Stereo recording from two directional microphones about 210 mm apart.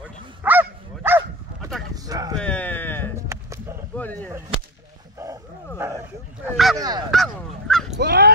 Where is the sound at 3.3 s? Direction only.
15° right (ahead or behind).